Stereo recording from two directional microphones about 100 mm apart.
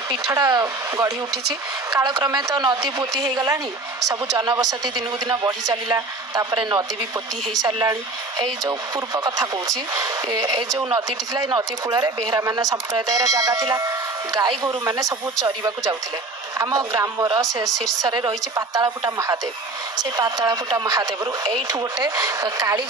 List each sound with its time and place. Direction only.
0.1 s speech: 40° right (ahead or behind)
2.3 s speech: 45° right (ahead or behind)
17.6 s speech: 50° right (ahead or behind)